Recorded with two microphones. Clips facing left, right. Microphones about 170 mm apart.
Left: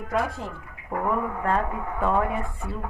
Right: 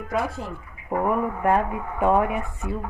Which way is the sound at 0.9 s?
15° right (ahead or behind).